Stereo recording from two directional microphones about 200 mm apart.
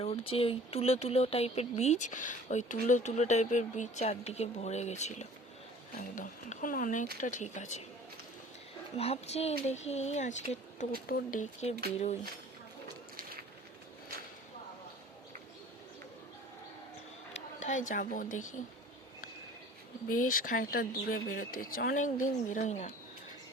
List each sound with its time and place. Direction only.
0.0 s speech: 30° left (ahead or behind)
9.0 s speech: 30° left (ahead or behind)
17.3 s speech: 35° left (ahead or behind)
20.2 s speech: 40° left (ahead or behind)